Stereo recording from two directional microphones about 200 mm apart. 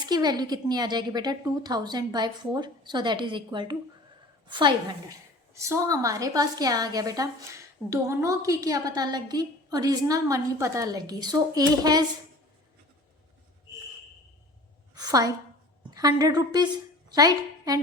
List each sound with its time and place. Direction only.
0.0 s a woman's voice: 20° right (ahead or behind)
14.9 s a sound: 20° right (ahead or behind)
16.0 s a woman's voice: 20° right (ahead or behind)